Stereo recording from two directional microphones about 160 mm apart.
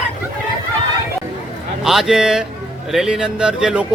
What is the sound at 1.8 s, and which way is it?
A man's voice, centre (ahead or behind).